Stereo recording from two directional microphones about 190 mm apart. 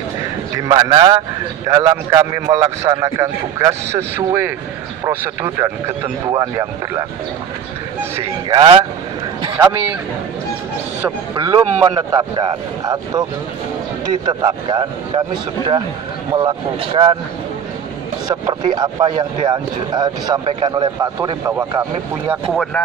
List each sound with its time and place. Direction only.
0.6 s a man's voice: 20° right (ahead or behind)
8.5 s speech: 25° right (ahead or behind)
9.6 s a man's voice: 10° right (ahead or behind)
11.3 s speech: 20° right (ahead or behind)
18.3 s speech: 25° right (ahead or behind)